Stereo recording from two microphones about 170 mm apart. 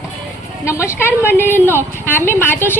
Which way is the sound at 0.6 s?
15° left (ahead or behind).